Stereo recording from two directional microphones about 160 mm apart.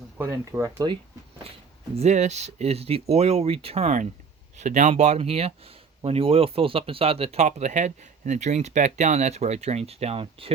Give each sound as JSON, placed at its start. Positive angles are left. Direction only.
{"t": 0.2, "sound": "speech", "side_deg": -15}
{"t": 2.0, "sound": "speech", "side_deg": -45}